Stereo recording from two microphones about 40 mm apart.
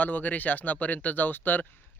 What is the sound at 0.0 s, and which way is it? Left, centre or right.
Speech, left.